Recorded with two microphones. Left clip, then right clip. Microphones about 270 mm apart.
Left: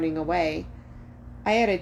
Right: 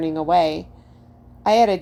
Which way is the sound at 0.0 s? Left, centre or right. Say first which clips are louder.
Right 7 dB; right.